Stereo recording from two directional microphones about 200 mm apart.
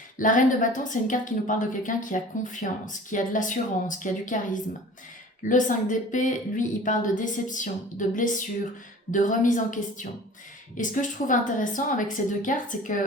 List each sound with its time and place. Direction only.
0.2 s a woman's voice: 40° left (ahead or behind)